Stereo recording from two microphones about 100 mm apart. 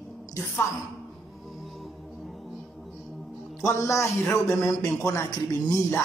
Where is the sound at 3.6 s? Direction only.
30° left (ahead or behind).